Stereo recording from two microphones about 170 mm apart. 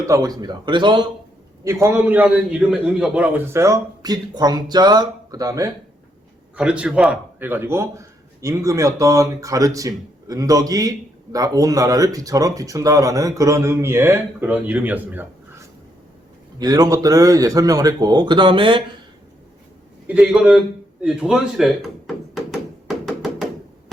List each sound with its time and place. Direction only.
0.0 s a man's voice: 20° right (ahead or behind)
1.6 s a man's voice: 15° right (ahead or behind)
6.6 s a man's voice: 5° right (ahead or behind)
16.6 s a man's voice: 20° right (ahead or behind)
20.1 s a man's voice: 5° right (ahead or behind)
22.5 s tap: centre (ahead or behind)